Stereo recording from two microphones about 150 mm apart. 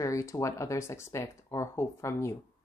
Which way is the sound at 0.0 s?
20° left (ahead or behind).